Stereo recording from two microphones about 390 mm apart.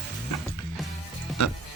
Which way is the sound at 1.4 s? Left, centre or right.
Left.